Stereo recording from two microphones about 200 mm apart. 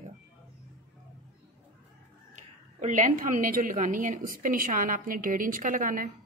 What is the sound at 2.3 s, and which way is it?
A woman's voice, 40° right (ahead or behind).